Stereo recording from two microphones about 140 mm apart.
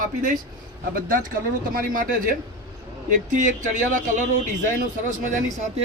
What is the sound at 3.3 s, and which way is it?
Speech, 65° right (ahead or behind).